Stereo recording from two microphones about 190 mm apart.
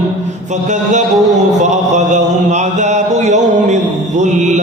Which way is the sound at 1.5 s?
40° right (ahead or behind).